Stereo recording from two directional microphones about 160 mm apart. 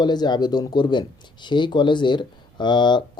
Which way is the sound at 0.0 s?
25° left (ahead or behind).